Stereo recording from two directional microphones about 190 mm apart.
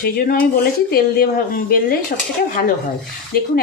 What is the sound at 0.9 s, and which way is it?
Speech, 50° left (ahead or behind).